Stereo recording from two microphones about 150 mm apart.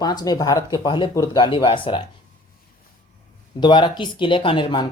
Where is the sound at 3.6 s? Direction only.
30° left (ahead or behind).